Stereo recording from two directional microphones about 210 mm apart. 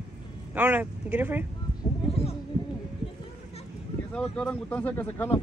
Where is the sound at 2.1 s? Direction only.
30° left (ahead or behind).